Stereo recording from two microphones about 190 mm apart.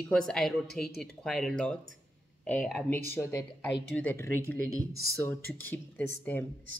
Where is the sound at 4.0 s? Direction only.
10° left (ahead or behind).